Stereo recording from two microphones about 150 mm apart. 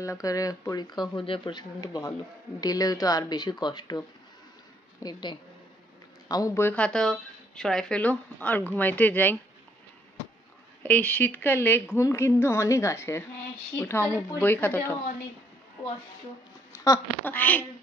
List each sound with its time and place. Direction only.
0.0 s speech: 20° left (ahead or behind)
5.0 s a woman's voice: 30° left (ahead or behind); by 9.4 s 10° left (ahead or behind)
10.8 s speech: 10° left (ahead or behind)
16.8 s speech: 25° left (ahead or behind)
17.3 s speech: 10° left (ahead or behind)